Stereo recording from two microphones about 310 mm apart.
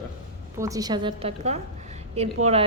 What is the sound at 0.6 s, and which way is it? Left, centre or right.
A woman's voice, centre.